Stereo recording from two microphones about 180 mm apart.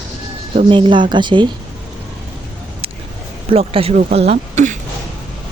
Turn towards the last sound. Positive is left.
turn(degrees=-40)  # may be behind; listen again after turning